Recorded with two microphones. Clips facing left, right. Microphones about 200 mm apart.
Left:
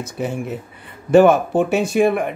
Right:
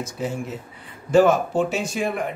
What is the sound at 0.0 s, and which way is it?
Speech, 60° left (ahead or behind).